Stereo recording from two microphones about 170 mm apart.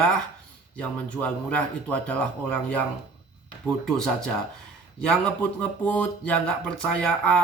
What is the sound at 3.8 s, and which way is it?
Speech, 5° left (ahead or behind).